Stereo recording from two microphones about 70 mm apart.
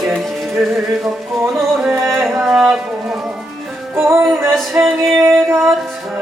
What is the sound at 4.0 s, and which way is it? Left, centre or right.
Music, right.